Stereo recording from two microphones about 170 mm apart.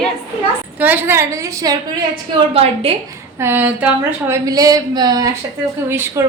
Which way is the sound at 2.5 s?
35° right (ahead or behind).